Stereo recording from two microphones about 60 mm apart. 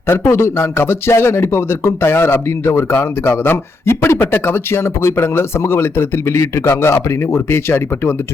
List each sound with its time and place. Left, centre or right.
0.1 s speech: left